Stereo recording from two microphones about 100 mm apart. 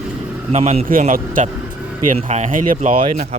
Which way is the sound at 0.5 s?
90° right.